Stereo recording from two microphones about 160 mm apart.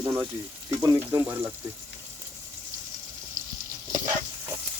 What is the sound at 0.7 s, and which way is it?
Stir, 20° right (ahead or behind).